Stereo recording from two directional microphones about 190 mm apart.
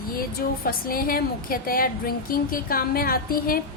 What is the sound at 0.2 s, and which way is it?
A woman's voice, 50° left (ahead or behind).